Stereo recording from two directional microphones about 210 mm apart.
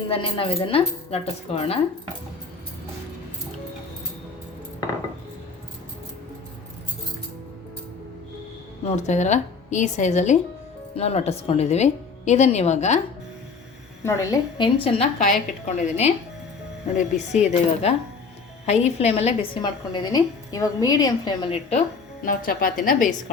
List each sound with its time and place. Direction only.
0.1 s speech: 25° left (ahead or behind)
8.8 s a woman's voice: 30° left (ahead or behind)
14.0 s a woman's voice: 15° left (ahead or behind)
14.8 s a woman's voice: 30° left (ahead or behind)